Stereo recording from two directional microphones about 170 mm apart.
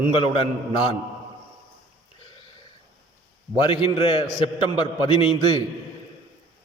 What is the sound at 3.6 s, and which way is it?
A man's voice, 30° left (ahead or behind).